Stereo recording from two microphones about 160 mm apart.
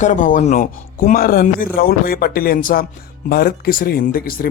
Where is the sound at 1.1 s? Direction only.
65° left (ahead or behind).